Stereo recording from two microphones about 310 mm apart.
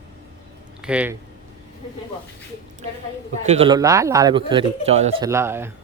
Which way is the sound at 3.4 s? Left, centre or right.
Centre.